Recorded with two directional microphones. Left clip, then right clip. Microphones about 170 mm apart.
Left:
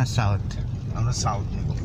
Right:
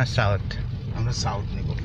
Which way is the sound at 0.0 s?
5° left (ahead or behind).